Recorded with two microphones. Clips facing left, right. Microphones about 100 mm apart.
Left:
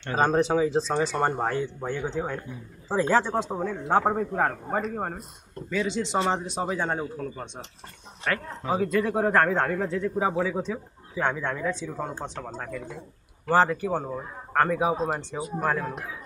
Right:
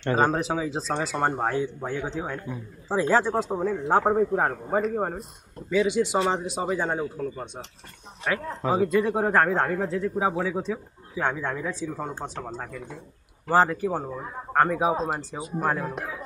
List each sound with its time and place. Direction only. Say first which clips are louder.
0.2 s a man's voice: left 6 dB; 5° right (ahead or behind)
15.0 s a man's voice: left 1 dB; 5° right (ahead or behind)